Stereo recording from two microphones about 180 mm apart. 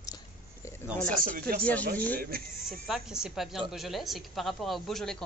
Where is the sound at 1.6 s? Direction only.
10° left (ahead or behind).